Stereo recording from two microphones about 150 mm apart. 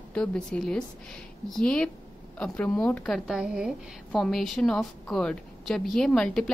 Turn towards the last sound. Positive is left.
turn(degrees=5)  # may be behind; listen again after turning